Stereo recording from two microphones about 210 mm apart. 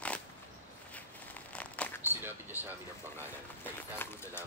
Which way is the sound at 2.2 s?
10° right (ahead or behind).